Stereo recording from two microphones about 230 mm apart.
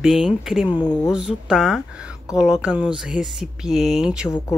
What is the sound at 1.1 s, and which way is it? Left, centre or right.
Speech, centre.